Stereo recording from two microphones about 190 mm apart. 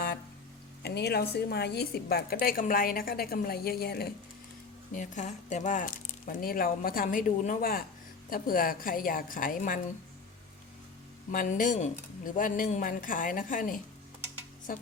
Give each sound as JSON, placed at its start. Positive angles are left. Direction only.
{"t": 0.8, "sound": "a woman's voice", "side_deg": 60}
{"t": 4.9, "sound": "speech", "side_deg": 40}
{"t": 11.3, "sound": "speech", "side_deg": 45}